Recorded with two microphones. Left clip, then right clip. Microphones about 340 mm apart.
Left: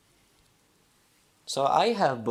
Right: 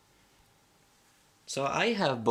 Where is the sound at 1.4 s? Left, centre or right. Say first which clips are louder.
Left 6 dB; centre.